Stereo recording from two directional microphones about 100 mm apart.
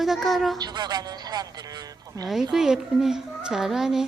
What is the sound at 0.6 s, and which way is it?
A man's voice, 45° right (ahead or behind).